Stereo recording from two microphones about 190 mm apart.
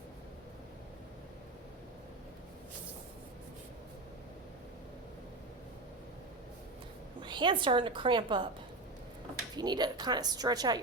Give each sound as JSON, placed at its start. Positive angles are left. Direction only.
{"t": 7.2, "sound": "a woman's voice", "side_deg": -25}
{"t": 9.6, "sound": "a woman's voice", "side_deg": -20}